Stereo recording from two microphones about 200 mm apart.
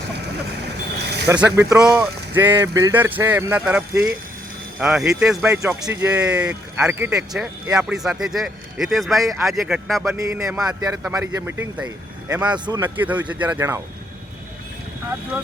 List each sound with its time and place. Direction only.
1.0 s snake: 55° right (ahead or behind)
1.3 s speech: 5° right (ahead or behind)
10.1 s speech: 15° right (ahead or behind)
12.5 s speech: 20° right (ahead or behind)
12.8 s speech: 10° right (ahead or behind)